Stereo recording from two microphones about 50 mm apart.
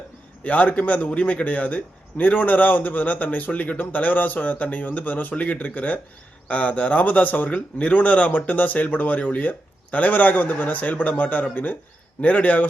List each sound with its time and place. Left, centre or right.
0.4 s a man's voice: left